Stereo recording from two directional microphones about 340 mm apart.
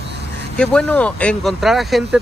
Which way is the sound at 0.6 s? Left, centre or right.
Centre.